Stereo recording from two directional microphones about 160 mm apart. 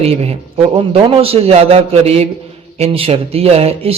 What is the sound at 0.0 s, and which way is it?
Speech, 40° right (ahead or behind).